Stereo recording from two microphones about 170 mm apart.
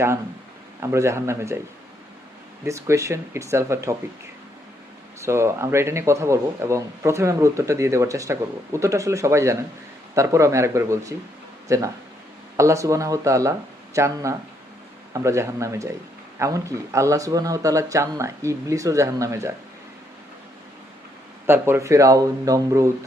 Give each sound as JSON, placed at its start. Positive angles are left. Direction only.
{"t": 0.8, "sound": "speech", "side_deg": -15}
{"t": 2.6, "sound": "speech", "side_deg": -20}
{"t": 5.2, "sound": "speech", "side_deg": -15}
{"t": 21.4, "sound": "speech", "side_deg": -15}